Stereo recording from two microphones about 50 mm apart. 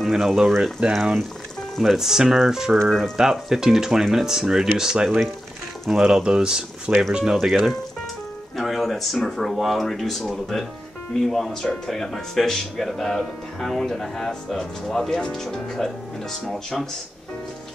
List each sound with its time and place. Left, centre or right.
0.0 s speech: centre
0.8 s speech: right
1.8 s speech: centre
2.8 s speech: centre
3.2 s speech: centre